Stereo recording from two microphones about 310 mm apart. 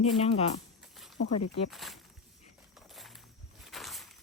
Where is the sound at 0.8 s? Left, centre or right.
Centre.